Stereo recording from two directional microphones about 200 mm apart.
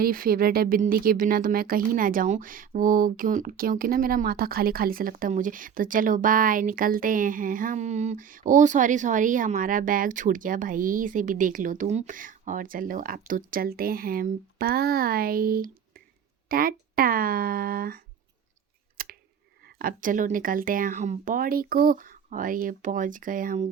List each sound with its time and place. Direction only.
0.0 s speech: 45° right (ahead or behind)
19.0 s scissors: 50° right (ahead or behind)
19.6 s speech: 45° right (ahead or behind)